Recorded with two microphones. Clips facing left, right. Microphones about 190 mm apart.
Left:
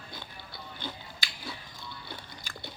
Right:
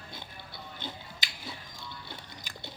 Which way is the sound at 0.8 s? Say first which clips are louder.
Left 2 dB; 20° right (ahead or behind).